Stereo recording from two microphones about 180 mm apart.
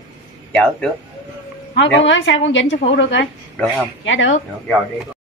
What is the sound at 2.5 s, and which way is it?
Speech, 90° left.